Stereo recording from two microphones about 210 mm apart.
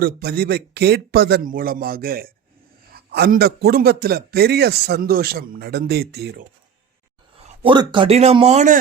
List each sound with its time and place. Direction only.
0.0 s a man's voice: 45° right (ahead or behind)
7.3 s speech: 25° right (ahead or behind)